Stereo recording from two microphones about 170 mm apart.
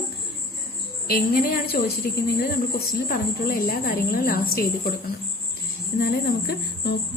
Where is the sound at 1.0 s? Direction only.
60° left (ahead or behind).